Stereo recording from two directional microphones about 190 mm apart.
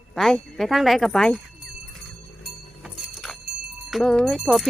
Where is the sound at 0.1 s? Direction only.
Centre (ahead or behind).